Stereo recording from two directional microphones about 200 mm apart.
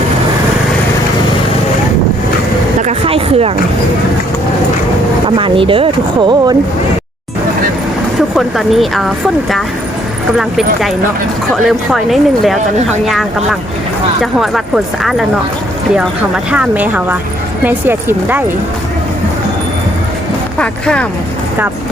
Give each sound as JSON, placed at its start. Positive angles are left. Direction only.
{"t": 2.8, "sound": "a sound", "side_deg": -30}
{"t": 5.4, "sound": "speech", "side_deg": -25}
{"t": 8.4, "sound": "speech", "side_deg": 0}
{"t": 10.3, "sound": "speech", "side_deg": 0}
{"t": 16.0, "sound": "speech", "side_deg": -5}
{"t": 20.6, "sound": "speech", "side_deg": 5}